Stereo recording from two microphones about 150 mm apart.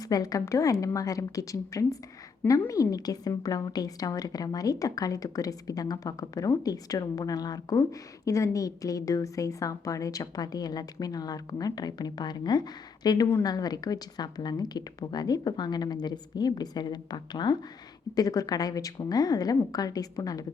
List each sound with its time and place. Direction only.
0.1 s a woman's voice: 25° left (ahead or behind)